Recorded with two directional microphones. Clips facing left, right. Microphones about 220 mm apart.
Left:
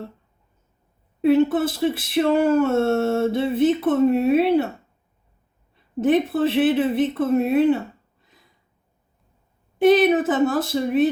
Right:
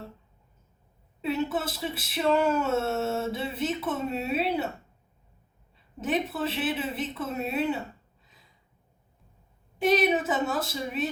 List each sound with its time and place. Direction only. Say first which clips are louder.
1.2 s speech: left 12 dB; 55° left (ahead or behind)
6.1 s speech: left 10 dB; 55° left (ahead or behind)
9.8 s speech: left 8 dB; 55° left (ahead or behind)